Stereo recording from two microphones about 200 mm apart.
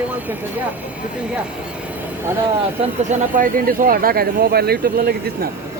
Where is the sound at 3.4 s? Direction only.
45° right (ahead or behind).